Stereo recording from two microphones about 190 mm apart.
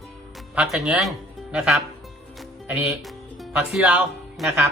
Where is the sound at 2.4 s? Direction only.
Centre (ahead or behind).